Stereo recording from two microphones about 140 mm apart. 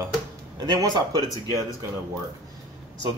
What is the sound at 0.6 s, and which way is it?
Speech, 30° right (ahead or behind).